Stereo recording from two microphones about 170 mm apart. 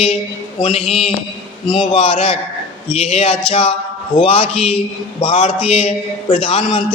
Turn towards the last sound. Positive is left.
turn(degrees=35)  # may be behind; listen again after turning